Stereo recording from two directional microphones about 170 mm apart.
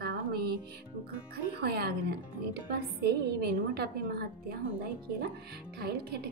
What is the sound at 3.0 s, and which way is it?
Speech, 70° right (ahead or behind).